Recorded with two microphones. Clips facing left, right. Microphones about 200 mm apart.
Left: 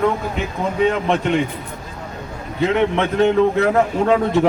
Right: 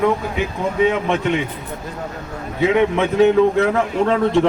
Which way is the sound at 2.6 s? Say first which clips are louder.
Right 1 dB; 5° right (ahead or behind).